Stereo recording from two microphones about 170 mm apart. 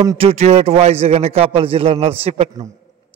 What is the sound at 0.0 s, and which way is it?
A man's voice, 30° right (ahead or behind).